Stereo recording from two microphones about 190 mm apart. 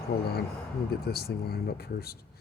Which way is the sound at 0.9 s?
55° left (ahead or behind).